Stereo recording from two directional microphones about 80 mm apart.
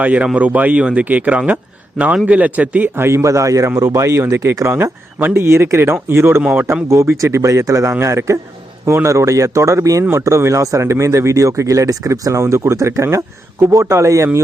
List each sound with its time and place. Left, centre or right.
0.0 s speech: centre
2.9 s speech: right